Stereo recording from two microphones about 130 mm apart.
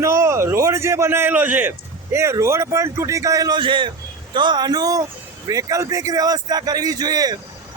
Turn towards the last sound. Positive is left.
turn(degrees=-30)  # may be behind; listen again after turning